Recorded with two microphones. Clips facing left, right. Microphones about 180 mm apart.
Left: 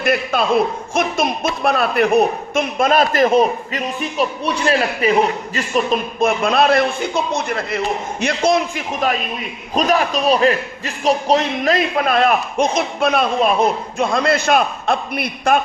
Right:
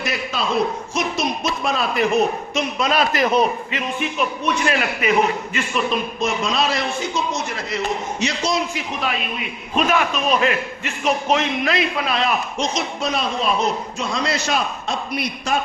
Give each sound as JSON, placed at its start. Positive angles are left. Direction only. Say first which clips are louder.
{"t": 0.0, "sound": "a man's voice", "louder": "left 7 dB", "side_deg": 55}